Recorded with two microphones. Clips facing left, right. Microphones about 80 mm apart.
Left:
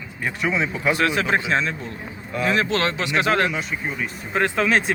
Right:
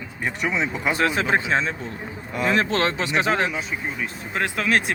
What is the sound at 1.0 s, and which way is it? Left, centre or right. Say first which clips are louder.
Speech: right 2 dB; right.